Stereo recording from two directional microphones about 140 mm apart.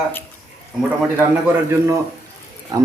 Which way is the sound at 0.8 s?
15° right (ahead or behind).